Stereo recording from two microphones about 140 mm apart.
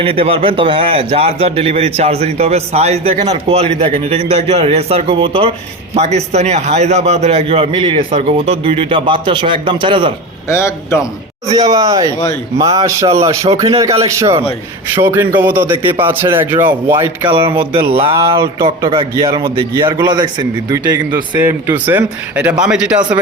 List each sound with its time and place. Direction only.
0.0 s a man's voice: 40° right (ahead or behind)
5.9 s a man's voice: 50° right (ahead or behind)
10.5 s a man's voice: 20° left (ahead or behind)
11.5 s speech: 25° right (ahead or behind)
17.2 s a man's voice: 35° right (ahead or behind)
21.3 s speech: 15° right (ahead or behind)